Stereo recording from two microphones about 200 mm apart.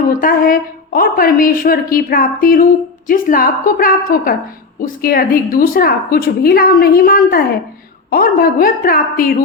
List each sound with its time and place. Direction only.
0.1 s a woman's voice: 45° left (ahead or behind)